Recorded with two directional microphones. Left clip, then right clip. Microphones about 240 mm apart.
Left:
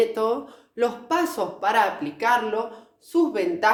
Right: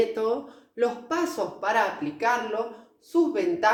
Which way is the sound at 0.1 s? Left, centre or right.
Left.